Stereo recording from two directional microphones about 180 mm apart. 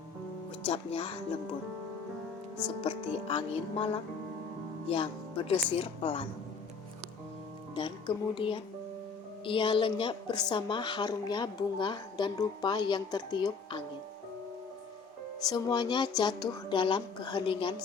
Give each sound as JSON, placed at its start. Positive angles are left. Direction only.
{"t": 0.6, "sound": "speech", "side_deg": 30}
{"t": 2.8, "sound": "speech", "side_deg": 30}
{"t": 7.8, "sound": "a woman's voice", "side_deg": 25}
{"t": 15.4, "sound": "a woman's voice", "side_deg": 20}